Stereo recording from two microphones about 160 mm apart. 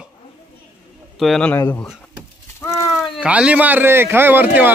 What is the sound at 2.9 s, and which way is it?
Speech, 5° right (ahead or behind).